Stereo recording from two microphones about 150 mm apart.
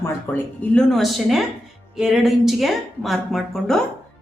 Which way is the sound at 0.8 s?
Centre (ahead or behind).